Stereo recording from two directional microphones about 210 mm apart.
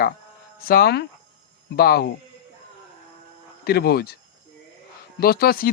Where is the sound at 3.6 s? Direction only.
50° left (ahead or behind).